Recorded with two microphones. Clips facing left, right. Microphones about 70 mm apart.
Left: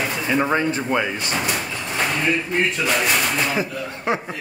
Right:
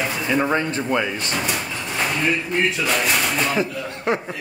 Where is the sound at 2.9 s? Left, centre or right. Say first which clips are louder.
Left 1 dB; centre.